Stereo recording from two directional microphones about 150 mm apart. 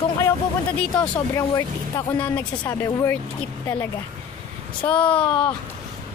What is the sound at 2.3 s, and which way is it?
Speech, 25° left (ahead or behind).